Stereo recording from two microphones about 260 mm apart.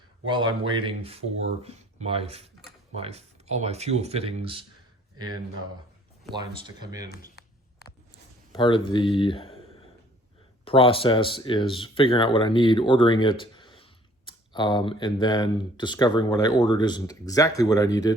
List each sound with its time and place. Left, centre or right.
0.3 s speech: centre
6.8 s speech: centre
8.5 s speech: centre
10.7 s speech: left